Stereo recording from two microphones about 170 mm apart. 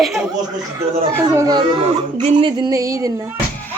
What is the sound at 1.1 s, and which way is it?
Music, 15° right (ahead or behind).